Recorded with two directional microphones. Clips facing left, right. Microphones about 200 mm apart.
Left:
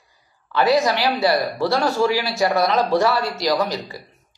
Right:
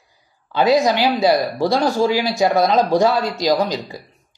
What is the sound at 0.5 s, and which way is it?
A man's voice, 15° right (ahead or behind).